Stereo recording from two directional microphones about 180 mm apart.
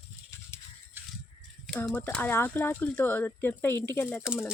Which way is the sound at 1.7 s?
5° left (ahead or behind).